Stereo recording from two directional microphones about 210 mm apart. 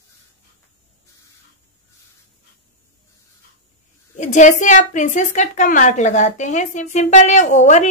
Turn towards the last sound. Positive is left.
turn(degrees=35)  # may be behind; listen again after turning